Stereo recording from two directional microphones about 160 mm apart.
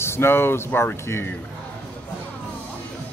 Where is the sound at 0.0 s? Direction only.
15° left (ahead or behind).